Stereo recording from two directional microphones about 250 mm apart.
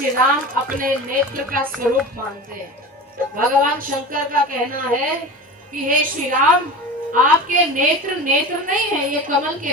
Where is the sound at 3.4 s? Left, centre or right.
Right.